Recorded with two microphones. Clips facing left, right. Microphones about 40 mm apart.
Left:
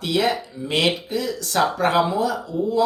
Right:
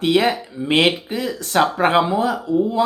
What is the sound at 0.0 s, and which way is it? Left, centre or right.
Speech, right.